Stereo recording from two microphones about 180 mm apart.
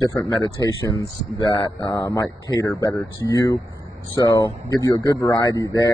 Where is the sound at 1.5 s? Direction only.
30° left (ahead or behind).